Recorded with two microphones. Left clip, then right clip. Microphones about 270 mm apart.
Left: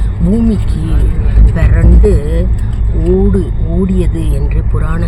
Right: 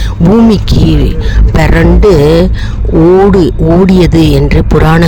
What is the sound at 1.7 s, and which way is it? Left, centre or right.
Speech, right.